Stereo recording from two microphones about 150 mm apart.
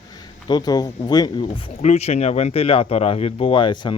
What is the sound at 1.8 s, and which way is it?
Speech, 45° left (ahead or behind).